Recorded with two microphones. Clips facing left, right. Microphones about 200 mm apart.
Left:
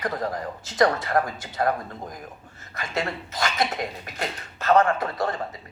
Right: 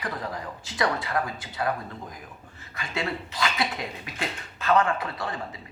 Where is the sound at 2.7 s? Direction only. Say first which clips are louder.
Left 2 dB; 45° left (ahead or behind).